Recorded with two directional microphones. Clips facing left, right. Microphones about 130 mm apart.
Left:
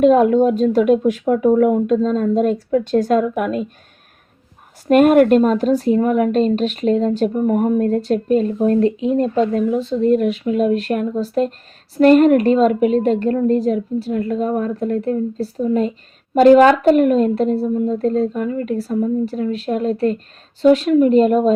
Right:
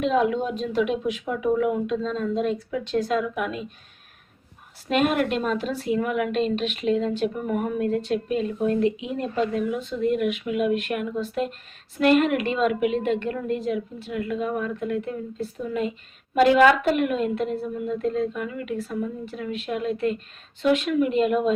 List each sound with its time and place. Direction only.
0.0 s speech: 45° left (ahead or behind)
4.9 s a woman's voice: 45° left (ahead or behind)